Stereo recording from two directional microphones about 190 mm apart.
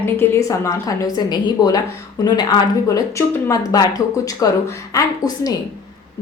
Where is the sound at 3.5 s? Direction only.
20° left (ahead or behind).